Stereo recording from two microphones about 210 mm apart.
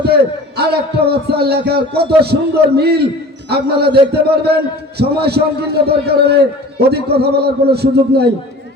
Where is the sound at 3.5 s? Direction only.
50° right (ahead or behind).